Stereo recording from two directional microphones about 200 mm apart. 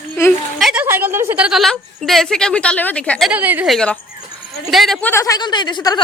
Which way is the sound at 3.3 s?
10° right (ahead or behind).